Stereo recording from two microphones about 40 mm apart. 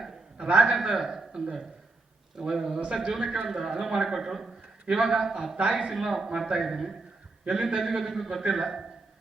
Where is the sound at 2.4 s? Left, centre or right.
Centre.